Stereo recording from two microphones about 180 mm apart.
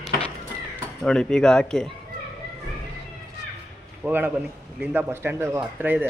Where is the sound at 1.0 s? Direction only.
5° left (ahead or behind).